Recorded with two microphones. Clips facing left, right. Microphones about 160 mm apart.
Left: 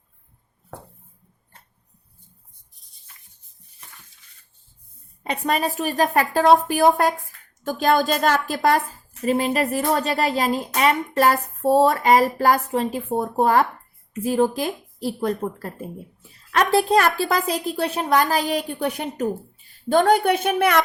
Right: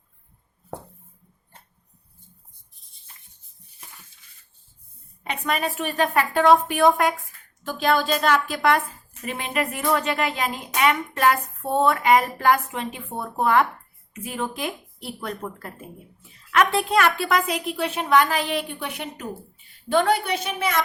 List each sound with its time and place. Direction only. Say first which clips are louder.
5.2 s a woman's voice: left 3 dB; 35° left (ahead or behind); by 20.8 s 65° left (ahead or behind)